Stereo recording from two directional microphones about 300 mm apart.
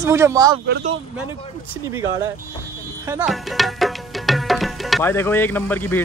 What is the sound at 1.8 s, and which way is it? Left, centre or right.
Speech, centre.